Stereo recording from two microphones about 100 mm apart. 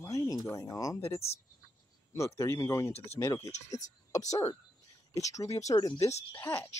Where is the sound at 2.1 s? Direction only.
30° left (ahead or behind).